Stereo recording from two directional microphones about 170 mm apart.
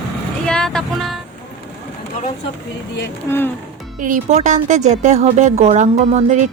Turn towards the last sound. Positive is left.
turn(degrees=-45)  # may be behind; listen again after turning